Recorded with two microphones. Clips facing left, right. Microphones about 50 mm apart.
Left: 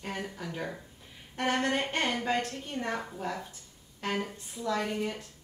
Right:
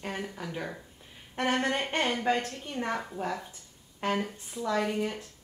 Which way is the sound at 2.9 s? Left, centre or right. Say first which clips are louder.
Right 3 dB; centre.